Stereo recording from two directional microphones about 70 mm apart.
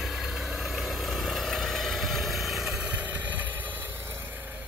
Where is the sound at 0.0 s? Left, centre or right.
Centre.